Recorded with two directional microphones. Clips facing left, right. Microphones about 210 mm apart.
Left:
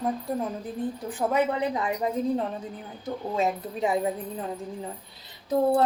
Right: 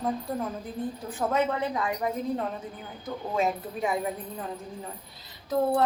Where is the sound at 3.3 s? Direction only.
30° left (ahead or behind).